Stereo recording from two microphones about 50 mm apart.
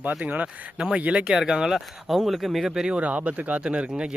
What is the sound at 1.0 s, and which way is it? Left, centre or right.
Speech, right.